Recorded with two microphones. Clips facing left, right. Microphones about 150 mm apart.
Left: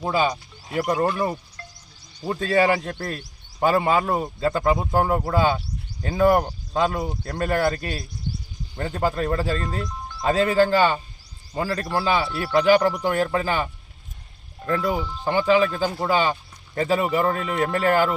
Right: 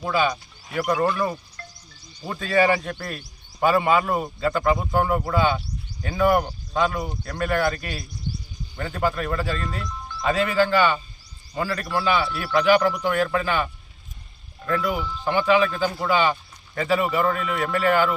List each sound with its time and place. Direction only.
0.0 s speech: 30° left (ahead or behind)
2.4 s speech: 30° left (ahead or behind)